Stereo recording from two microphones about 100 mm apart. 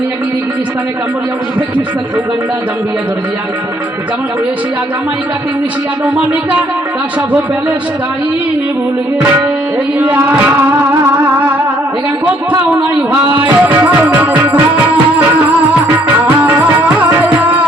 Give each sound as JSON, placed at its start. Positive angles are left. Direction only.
{"t": 6.1, "sound": "music", "side_deg": -10}
{"t": 10.2, "sound": "music", "side_deg": -15}
{"t": 12.7, "sound": "music", "side_deg": -15}
{"t": 16.4, "sound": "music", "side_deg": -20}